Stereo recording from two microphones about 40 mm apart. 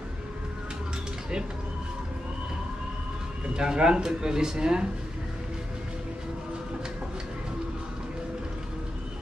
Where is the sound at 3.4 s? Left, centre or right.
Right.